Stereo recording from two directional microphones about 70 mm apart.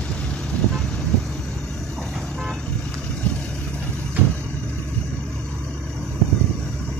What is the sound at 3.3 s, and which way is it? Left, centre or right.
Vehicle, centre.